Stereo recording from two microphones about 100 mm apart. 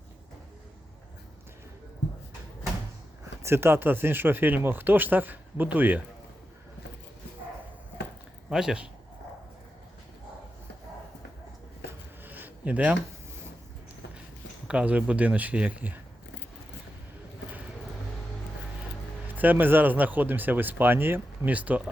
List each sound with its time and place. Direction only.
3.4 s speech: 25° right (ahead or behind)
8.4 s speech: 5° right (ahead or behind)
12.2 s a sound: 20° right (ahead or behind)
14.7 s speech: 10° right (ahead or behind)
19.3 s speech: 20° right (ahead or behind)